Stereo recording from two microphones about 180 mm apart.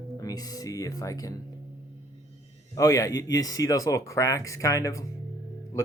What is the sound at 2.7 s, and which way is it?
Speech, 20° left (ahead or behind).